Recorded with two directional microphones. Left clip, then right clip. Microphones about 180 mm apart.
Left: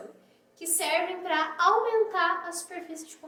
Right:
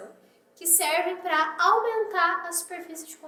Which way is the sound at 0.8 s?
15° right (ahead or behind).